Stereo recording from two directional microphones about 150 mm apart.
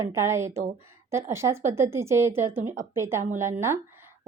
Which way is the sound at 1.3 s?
20° right (ahead or behind).